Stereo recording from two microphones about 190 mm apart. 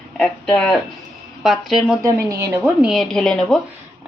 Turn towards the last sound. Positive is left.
turn(degrees=5)  # may be behind; listen again after turning